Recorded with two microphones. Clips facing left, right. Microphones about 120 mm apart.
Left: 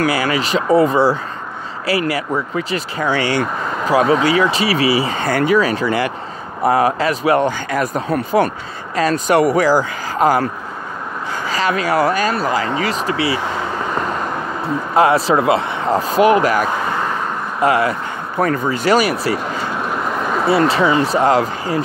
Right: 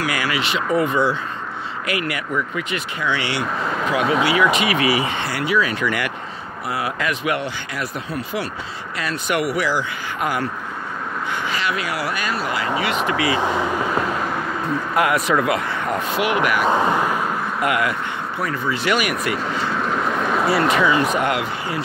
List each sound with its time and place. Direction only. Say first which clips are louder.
0.0 s speech: left 5 dB; 30° left (ahead or behind)
6.6 s speech: left 10 dB; 40° left (ahead or behind)
13.9 s vehicle: left 1 dB; 5° right (ahead or behind)
15.0 s speech: left 6 dB; 30° left (ahead or behind)
16.6 s speech: right 2 dB; 20° right (ahead or behind)
17.6 s speech: left 7 dB; 30° left (ahead or behind)
18.4 s speech: left 7 dB; 45° left (ahead or behind)
19.7 s vehicle: even; 5° left (ahead or behind)
20.4 s speech: left 4 dB; 30° left (ahead or behind)